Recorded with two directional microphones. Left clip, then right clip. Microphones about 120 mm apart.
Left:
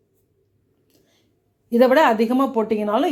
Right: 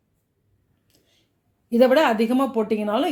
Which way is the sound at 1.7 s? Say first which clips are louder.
Left 2 dB; 20° right (ahead or behind).